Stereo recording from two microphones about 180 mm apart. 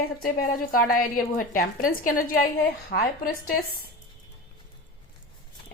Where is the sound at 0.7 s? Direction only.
55° left (ahead or behind).